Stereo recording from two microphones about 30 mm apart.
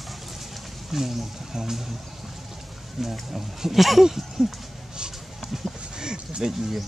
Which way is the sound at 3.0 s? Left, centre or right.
Centre.